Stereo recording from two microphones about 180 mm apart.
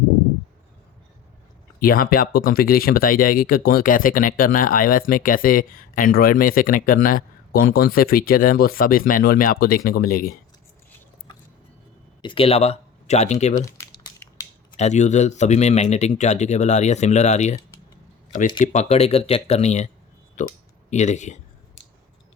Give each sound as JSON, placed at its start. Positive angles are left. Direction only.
{"t": 1.8, "sound": "speech", "side_deg": 55}
{"t": 12.2, "sound": "speech", "side_deg": 30}
{"t": 13.6, "sound": "a sound", "side_deg": 15}
{"t": 14.8, "sound": "speech", "side_deg": 40}
{"t": 18.6, "sound": "speech", "side_deg": 40}